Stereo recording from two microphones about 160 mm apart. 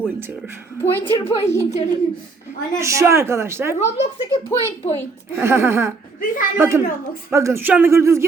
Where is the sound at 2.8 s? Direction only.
15° right (ahead or behind).